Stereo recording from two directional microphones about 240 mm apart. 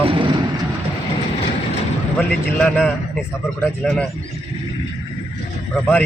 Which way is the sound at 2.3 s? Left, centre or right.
Centre.